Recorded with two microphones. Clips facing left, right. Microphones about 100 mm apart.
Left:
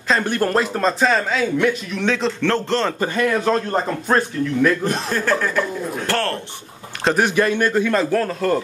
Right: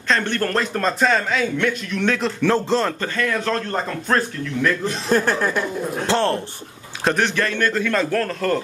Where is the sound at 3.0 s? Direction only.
15° left (ahead or behind).